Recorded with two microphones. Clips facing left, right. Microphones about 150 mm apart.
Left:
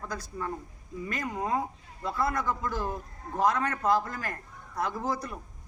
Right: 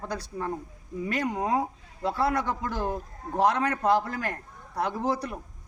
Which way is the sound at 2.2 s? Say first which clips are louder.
Right 3 dB; 70° right (ahead or behind).